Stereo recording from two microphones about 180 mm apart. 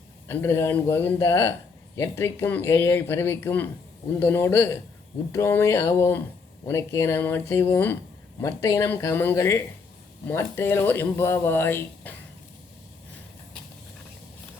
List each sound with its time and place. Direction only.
0.3 s speech: 10° left (ahead or behind)